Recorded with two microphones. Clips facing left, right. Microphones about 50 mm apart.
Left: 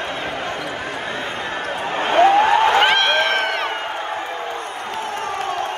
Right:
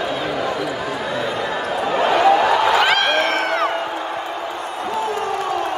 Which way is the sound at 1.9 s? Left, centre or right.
Left.